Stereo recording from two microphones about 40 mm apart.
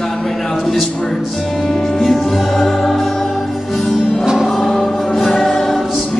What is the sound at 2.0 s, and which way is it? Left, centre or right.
Music, centre.